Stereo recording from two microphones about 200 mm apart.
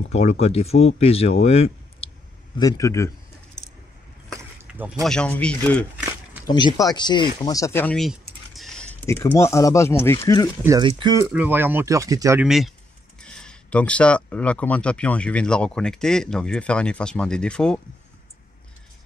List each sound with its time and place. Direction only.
0.1 s speech: 30° left (ahead or behind)
2.6 s a man's voice: 15° left (ahead or behind)
4.6 s a sound: 10° right (ahead or behind)
5.0 s speech: 5° left (ahead or behind)
6.4 s speech: 20° left (ahead or behind)
10.6 s speech: 15° right (ahead or behind)
11.2 s speech: 10° right (ahead or behind)
12.4 s speech: centre (ahead or behind)